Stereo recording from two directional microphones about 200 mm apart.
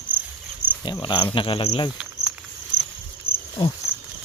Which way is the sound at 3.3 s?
5° right (ahead or behind).